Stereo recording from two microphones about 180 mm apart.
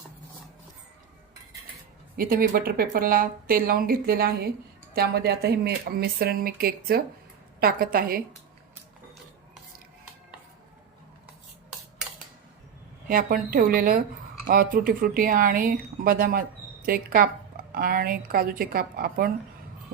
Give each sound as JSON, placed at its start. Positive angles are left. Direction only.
{"t": 2.1, "sound": "speech", "side_deg": -55}
{"t": 13.1, "sound": "speech", "side_deg": -50}